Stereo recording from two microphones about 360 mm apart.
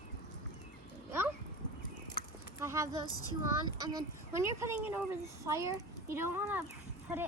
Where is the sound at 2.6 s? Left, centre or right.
Centre.